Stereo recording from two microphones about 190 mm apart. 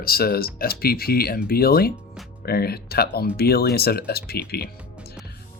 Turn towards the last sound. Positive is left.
turn(degrees=55)  # may be behind; listen again after turning